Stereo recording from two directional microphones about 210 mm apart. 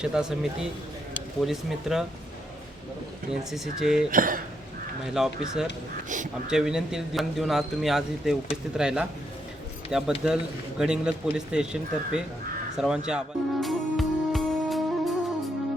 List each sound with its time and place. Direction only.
0.0 s a man's voice: 5° right (ahead or behind)
3.5 s a man's voice: centre (ahead or behind)
4.1 s speech: 40° right (ahead or behind)
5.1 s a man's voice: centre (ahead or behind)
13.1 s music: centre (ahead or behind)